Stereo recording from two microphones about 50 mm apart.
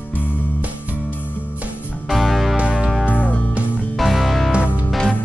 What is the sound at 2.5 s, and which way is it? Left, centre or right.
Music, right.